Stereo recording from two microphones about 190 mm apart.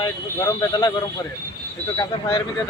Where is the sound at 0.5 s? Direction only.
20° left (ahead or behind).